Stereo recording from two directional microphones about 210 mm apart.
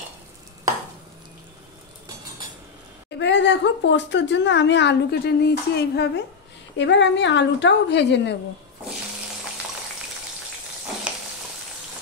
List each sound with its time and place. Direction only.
3.2 s a woman's voice: 60° left (ahead or behind)